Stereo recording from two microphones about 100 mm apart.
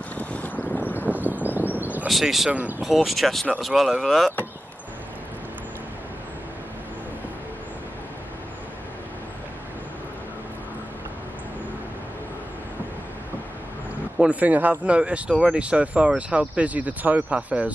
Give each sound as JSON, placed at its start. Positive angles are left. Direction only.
{"t": 0.2, "sound": "boat", "side_deg": 15}
{"t": 0.9, "sound": "a sound", "side_deg": -15}
{"t": 2.0, "sound": "speech", "side_deg": 0}
{"t": 14.1, "sound": "speech", "side_deg": -15}